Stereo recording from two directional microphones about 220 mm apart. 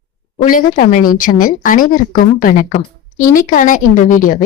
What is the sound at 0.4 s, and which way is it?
A woman's voice, 35° left (ahead or behind).